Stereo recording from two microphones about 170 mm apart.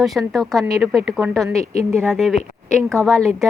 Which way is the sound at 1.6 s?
40° left (ahead or behind).